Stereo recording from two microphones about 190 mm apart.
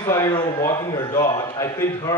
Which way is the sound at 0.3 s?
25° left (ahead or behind).